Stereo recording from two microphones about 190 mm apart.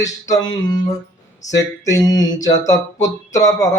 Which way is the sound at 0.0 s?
20° left (ahead or behind).